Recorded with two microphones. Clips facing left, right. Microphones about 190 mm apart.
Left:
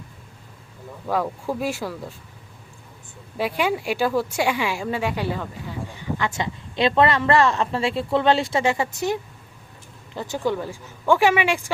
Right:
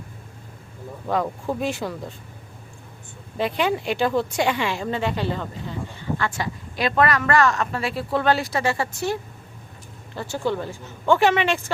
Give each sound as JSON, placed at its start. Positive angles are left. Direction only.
{"t": 1.1, "sound": "speech", "side_deg": 5}
{"t": 3.3, "sound": "a woman's voice", "side_deg": 5}
{"t": 10.2, "sound": "a woman's voice", "side_deg": 15}